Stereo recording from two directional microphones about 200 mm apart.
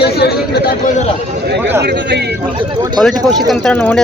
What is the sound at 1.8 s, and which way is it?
Speech, 55° right (ahead or behind).